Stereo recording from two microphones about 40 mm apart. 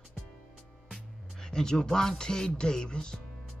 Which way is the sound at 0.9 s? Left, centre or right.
Centre.